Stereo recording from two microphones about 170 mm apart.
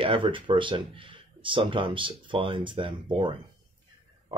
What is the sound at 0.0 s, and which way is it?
Speech, 30° right (ahead or behind).